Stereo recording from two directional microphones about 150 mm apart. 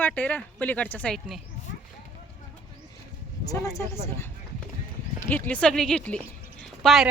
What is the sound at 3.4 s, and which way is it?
Speech, 20° left (ahead or behind).